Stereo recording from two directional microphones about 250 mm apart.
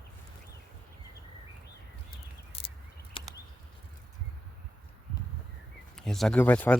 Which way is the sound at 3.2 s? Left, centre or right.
Left.